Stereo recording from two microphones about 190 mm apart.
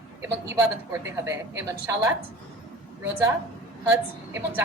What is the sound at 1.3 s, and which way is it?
Speech, 15° right (ahead or behind).